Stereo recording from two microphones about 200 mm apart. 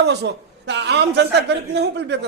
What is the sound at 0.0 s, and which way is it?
A man's voice, 55° right (ahead or behind).